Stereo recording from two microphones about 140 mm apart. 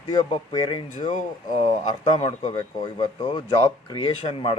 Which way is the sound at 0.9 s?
60° left (ahead or behind).